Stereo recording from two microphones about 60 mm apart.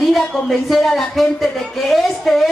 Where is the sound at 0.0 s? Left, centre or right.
Centre.